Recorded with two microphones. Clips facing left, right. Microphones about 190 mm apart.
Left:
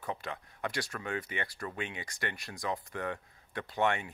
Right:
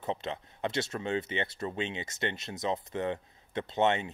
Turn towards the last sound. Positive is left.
turn(degrees=-20)  # may be behind; listen again after turning